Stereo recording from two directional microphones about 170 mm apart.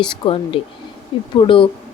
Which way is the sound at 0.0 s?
30° left (ahead or behind).